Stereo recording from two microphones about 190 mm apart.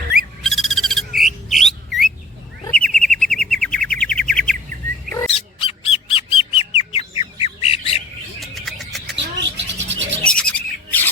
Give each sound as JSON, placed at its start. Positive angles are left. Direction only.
{"t": 0.4, "sound": "bird", "side_deg": 0}
{"t": 5.3, "sound": "bird", "side_deg": 30}
{"t": 7.4, "sound": "squawk", "side_deg": 30}
{"t": 8.4, "sound": "bird", "side_deg": 0}
{"t": 9.1, "sound": "bird", "side_deg": -70}
{"t": 10.3, "sound": "bird", "side_deg": 5}